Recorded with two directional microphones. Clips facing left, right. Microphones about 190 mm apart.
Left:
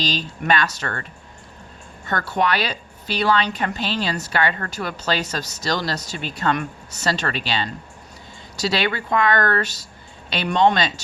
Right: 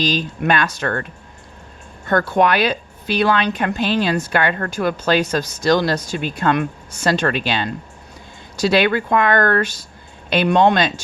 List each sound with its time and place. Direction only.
0.0 s speech: 50° right (ahead or behind)
2.0 s speech: 50° right (ahead or behind)